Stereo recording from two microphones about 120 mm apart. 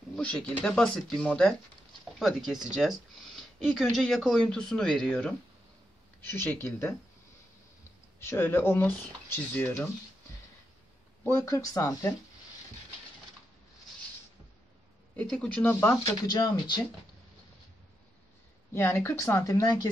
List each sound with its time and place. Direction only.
0.1 s speech: 5° left (ahead or behind)
6.2 s speech: 20° left (ahead or behind)
8.2 s speech: 20° left (ahead or behind)
11.2 s speech: 20° left (ahead or behind)
15.1 s speech: 5° left (ahead or behind)
16.3 s speech: 35° left (ahead or behind)
18.7 s speech: 20° left (ahead or behind)